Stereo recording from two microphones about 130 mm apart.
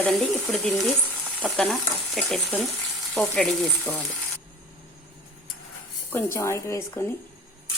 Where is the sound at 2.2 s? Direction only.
5° left (ahead or behind).